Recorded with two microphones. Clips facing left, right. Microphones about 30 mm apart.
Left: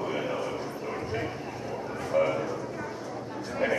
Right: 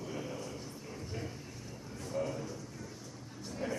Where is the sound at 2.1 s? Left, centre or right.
Left.